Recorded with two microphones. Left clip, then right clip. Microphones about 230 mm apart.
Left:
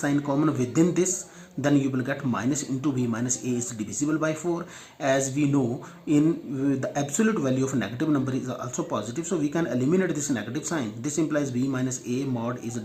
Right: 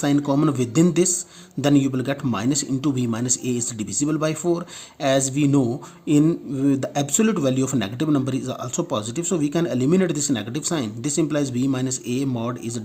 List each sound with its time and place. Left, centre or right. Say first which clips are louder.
0.0 s speech: right 4 dB; right